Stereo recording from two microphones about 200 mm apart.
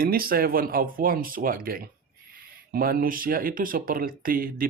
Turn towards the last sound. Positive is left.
turn(degrees=-45)  # may be behind; listen again after turning